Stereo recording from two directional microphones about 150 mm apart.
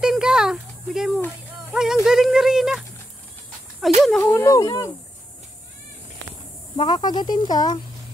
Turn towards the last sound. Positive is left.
turn(degrees=30)  # may be behind; listen again after turning